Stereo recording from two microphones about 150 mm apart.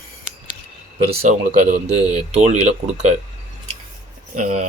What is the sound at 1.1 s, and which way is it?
Speech, 50° right (ahead or behind).